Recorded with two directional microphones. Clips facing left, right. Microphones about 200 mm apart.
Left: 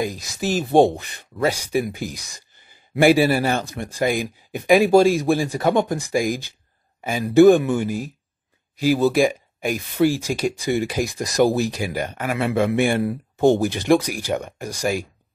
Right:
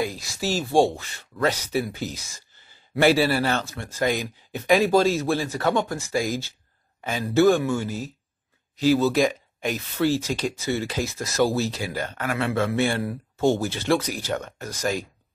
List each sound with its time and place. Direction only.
0.0 s speech: 20° left (ahead or behind)